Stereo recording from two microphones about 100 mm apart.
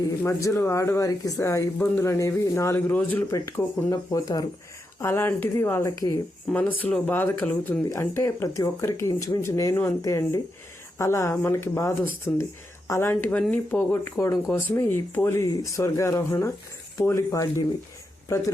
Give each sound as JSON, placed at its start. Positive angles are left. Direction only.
{"t": 0.3, "sound": "speech", "side_deg": 30}
{"t": 3.3, "sound": "speech", "side_deg": 30}
{"t": 4.9, "sound": "speech", "side_deg": 25}